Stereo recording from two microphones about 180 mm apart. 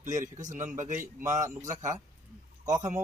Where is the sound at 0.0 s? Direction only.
40° right (ahead or behind).